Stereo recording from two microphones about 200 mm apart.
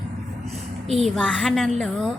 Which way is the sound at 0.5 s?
30° right (ahead or behind).